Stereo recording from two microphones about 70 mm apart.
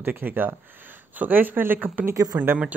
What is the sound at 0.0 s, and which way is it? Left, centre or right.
Speech, right.